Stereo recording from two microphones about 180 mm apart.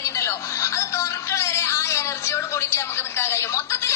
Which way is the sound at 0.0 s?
15° left (ahead or behind).